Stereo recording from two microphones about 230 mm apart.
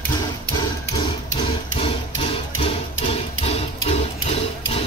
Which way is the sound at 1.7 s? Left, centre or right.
Left.